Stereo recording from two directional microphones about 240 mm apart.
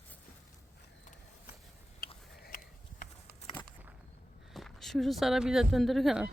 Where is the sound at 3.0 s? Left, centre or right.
Left.